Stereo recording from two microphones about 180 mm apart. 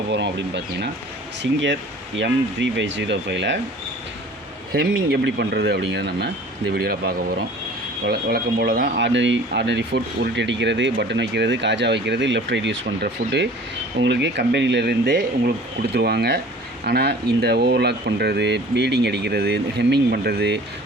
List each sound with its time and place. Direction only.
0.1 s speech: 70° right (ahead or behind)
4.7 s speech: 65° right (ahead or behind)
9.0 s speech: 85° right; by 20.6 s 65° right (ahead or behind)